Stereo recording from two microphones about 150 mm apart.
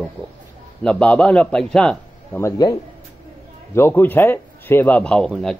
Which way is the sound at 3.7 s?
15° left (ahead or behind).